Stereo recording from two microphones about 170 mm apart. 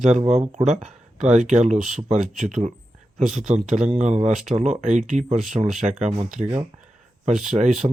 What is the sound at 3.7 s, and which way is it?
Speech, 40° right (ahead or behind).